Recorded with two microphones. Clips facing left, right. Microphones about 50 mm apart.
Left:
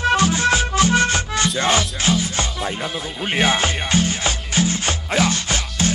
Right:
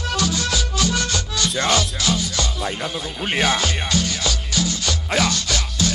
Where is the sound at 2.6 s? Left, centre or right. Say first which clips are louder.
Left 1 dB; centre.